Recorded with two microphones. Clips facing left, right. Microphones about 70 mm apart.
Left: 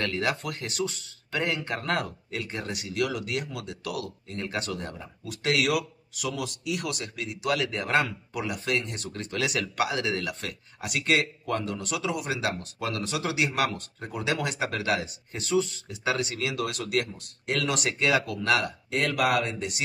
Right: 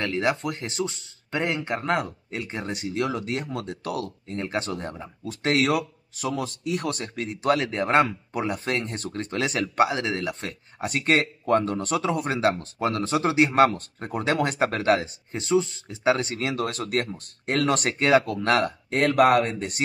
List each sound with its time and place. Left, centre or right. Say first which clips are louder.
0.0 s speech: right 3 dB; right